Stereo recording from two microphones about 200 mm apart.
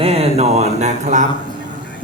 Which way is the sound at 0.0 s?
30° right (ahead or behind).